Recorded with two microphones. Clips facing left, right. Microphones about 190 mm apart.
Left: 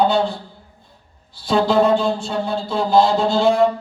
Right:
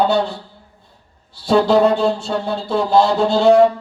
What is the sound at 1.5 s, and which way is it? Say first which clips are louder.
Music: right 2 dB; 65° right (ahead or behind).